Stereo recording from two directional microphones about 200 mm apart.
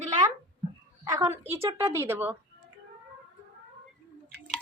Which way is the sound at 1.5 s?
10° right (ahead or behind).